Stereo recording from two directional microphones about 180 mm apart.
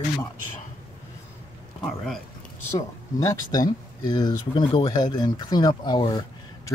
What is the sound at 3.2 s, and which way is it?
Speech, 20° left (ahead or behind).